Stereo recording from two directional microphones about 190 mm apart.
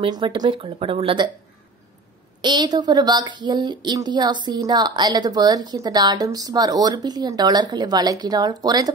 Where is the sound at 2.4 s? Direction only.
20° right (ahead or behind).